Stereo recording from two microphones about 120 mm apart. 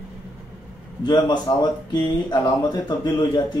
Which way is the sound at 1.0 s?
35° left (ahead or behind).